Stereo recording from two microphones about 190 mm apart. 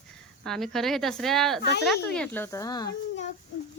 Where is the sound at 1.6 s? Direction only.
60° left (ahead or behind).